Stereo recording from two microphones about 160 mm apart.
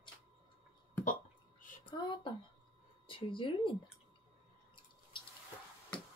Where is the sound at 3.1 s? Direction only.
30° left (ahead or behind).